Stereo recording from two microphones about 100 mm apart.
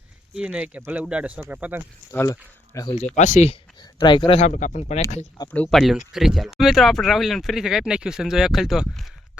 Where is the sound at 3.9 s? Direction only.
55° left (ahead or behind).